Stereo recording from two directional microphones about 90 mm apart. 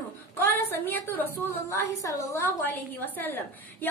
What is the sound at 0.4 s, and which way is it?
A woman's voice, 30° left (ahead or behind).